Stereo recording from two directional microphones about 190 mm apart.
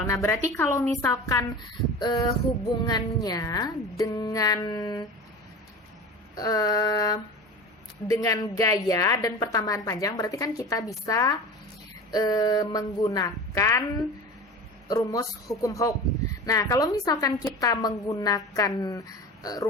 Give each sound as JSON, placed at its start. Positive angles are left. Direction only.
{"t": 0.1, "sound": "a woman's voice", "side_deg": 15}
{"t": 6.3, "sound": "a woman's voice", "side_deg": 20}
{"t": 14.8, "sound": "a woman's voice", "side_deg": 15}